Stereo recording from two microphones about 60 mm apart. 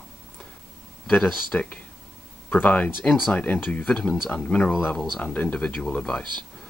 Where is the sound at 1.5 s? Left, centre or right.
Left.